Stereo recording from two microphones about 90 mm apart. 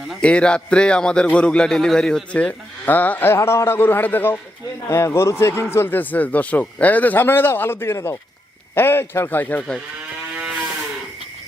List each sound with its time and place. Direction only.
0.2 s a man's voice: 10° left (ahead or behind)
4.9 s a man's voice: 35° left (ahead or behind)